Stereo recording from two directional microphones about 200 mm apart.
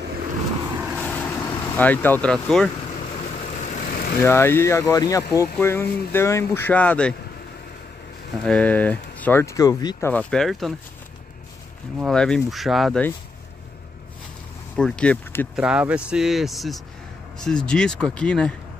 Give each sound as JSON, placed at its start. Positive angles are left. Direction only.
{"t": 0.7, "sound": "vehicle", "side_deg": 0}
{"t": 1.8, "sound": "speech", "side_deg": 10}
{"t": 3.3, "sound": "vehicle", "side_deg": 40}
{"t": 4.2, "sound": "speech", "side_deg": 10}
{"t": 8.5, "sound": "speech", "side_deg": 5}
{"t": 12.0, "sound": "speech", "side_deg": 5}
{"t": 14.8, "sound": "speech", "side_deg": 5}
{"t": 15.6, "sound": "speech", "side_deg": -5}